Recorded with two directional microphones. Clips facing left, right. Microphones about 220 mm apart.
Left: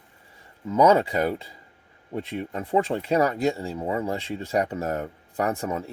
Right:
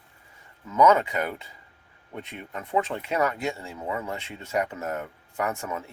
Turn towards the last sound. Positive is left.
turn(degrees=30)  # may be behind; listen again after turning